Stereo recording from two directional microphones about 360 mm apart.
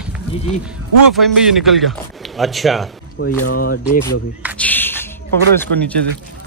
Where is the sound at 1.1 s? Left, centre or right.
Centre.